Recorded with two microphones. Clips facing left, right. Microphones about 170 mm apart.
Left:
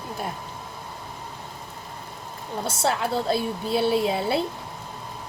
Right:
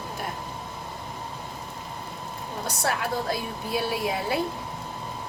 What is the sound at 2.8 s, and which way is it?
A woman's voice, 25° left (ahead or behind).